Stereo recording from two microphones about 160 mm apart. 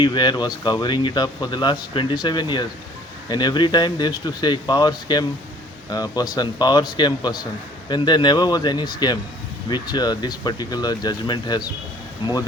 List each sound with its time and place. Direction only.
0.0 s speech: 30° left (ahead or behind)